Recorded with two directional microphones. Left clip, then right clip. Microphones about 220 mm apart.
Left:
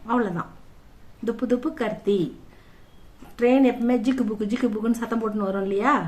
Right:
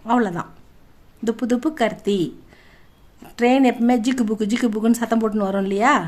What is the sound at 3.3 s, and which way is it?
A woman's voice, 40° right (ahead or behind).